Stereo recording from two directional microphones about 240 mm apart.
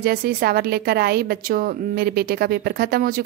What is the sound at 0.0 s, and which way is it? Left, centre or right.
A woman's voice, right.